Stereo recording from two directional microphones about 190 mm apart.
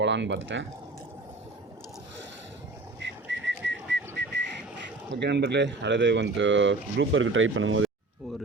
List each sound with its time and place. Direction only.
0.0 s speech: 70° right (ahead or behind)
3.0 s whistling: 70° right (ahead or behind)
5.1 s speech: 65° right (ahead or behind); by 7.9 s 90° right